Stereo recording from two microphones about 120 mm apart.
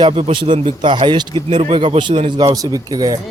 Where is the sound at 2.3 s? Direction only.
30° right (ahead or behind).